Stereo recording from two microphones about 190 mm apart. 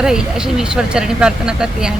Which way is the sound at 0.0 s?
5° right (ahead or behind).